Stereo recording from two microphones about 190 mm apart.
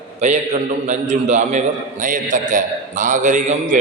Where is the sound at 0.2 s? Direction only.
35° right (ahead or behind).